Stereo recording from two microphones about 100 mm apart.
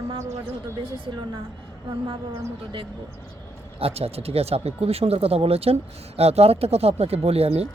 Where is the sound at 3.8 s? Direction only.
85° right.